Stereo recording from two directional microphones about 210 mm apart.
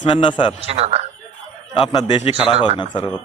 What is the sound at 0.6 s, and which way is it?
Speech, 30° right (ahead or behind).